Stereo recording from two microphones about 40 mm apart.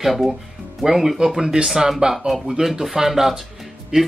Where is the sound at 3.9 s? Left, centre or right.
Right.